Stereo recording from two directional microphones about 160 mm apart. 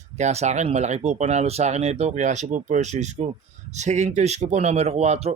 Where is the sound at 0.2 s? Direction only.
45° right (ahead or behind).